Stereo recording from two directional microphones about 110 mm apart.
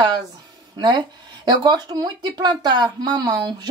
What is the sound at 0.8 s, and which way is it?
Speech, 40° right (ahead or behind).